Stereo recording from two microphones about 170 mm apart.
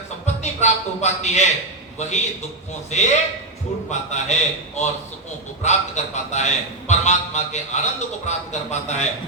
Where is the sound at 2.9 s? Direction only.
45° left (ahead or behind).